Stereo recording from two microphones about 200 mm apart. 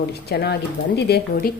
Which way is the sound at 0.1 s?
55° left (ahead or behind).